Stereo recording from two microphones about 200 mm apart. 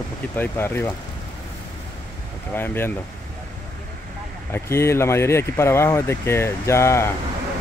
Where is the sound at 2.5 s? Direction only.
10° left (ahead or behind).